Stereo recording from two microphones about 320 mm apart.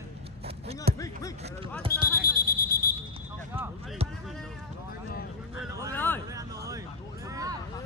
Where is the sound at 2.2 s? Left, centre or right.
Left.